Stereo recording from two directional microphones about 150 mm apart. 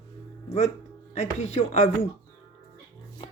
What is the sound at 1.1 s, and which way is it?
Speech, 45° left (ahead or behind).